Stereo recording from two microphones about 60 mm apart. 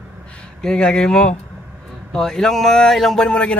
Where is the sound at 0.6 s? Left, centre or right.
Centre.